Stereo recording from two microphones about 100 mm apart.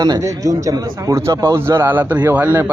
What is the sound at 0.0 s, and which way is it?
Speech, 35° right (ahead or behind).